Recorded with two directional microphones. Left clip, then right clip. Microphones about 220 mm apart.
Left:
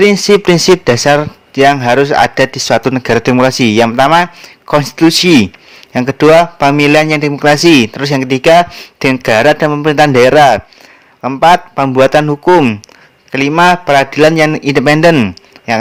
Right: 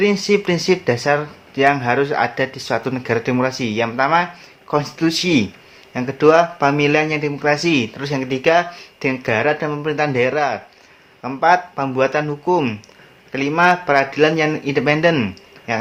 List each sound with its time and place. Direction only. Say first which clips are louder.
0.0 s a man's voice: left 9 dB; 45° left (ahead or behind)